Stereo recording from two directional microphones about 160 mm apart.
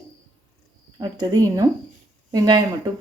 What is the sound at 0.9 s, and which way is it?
A woman's voice, 25° right (ahead or behind).